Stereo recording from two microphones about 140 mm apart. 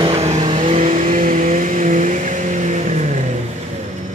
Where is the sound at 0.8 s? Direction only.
65° right (ahead or behind).